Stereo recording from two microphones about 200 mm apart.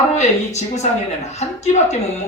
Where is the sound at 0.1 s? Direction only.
35° left (ahead or behind).